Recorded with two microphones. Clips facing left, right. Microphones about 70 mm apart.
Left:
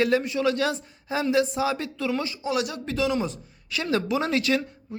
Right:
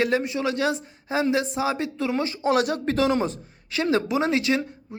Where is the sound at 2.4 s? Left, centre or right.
Right.